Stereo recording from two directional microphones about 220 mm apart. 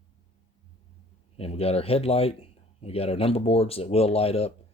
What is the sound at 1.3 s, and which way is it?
A man's voice, 25° left (ahead or behind).